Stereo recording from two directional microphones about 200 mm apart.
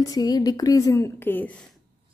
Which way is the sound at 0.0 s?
20° left (ahead or behind).